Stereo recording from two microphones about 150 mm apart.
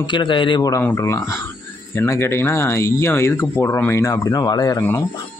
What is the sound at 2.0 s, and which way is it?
Speech, 15° left (ahead or behind).